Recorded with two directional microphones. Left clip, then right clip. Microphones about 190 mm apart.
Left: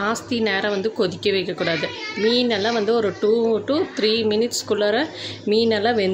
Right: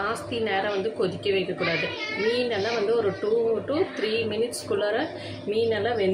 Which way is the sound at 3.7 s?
55° left (ahead or behind).